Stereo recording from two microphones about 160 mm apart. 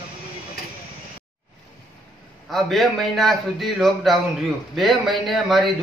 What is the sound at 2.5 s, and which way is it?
Speech, centre (ahead or behind).